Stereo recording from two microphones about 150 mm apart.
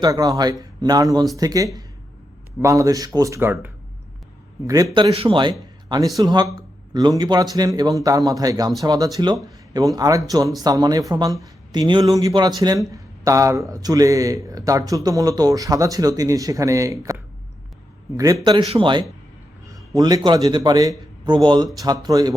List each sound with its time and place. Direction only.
0.0 s speech: 25° right (ahead or behind)
5.1 s speech: 35° right (ahead or behind)
18.6 s speech: 35° right (ahead or behind)